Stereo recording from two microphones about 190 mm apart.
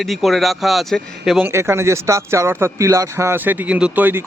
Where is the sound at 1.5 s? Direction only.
15° right (ahead or behind).